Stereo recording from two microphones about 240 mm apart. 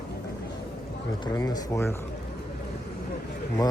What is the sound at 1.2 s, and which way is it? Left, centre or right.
Speech, centre.